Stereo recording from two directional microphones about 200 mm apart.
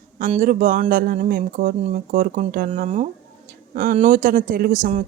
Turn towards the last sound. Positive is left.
turn(degrees=-40)  # may be behind; listen again after turning